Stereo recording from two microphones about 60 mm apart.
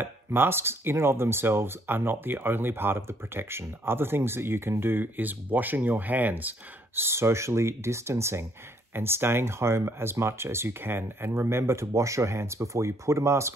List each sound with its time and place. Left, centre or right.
0.0 s speech: right
7.0 s speech: right